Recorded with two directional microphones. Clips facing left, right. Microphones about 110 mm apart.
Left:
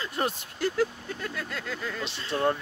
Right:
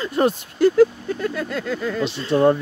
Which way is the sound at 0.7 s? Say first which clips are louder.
Right 12 dB; 60° right (ahead or behind).